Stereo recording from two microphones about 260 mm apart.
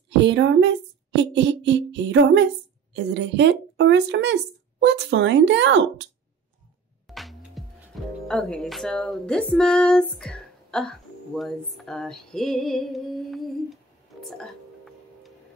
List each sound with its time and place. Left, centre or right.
0.2 s music: right
2.9 s speech: right
7.1 s music: centre
8.3 s speech: centre
14.2 s music: centre